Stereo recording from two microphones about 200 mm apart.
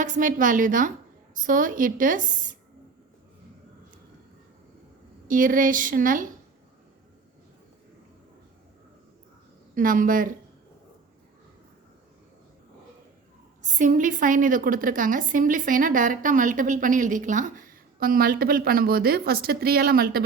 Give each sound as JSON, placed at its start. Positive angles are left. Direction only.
{"t": 0.0, "sound": "a woman's voice", "side_deg": -40}
{"t": 5.3, "sound": "a woman's voice", "side_deg": -40}
{"t": 9.7, "sound": "a woman's voice", "side_deg": -40}
{"t": 13.6, "sound": "a woman's voice", "side_deg": -40}